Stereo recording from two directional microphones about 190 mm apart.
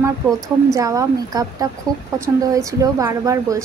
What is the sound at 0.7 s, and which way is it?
A woman's voice, 15° right (ahead or behind).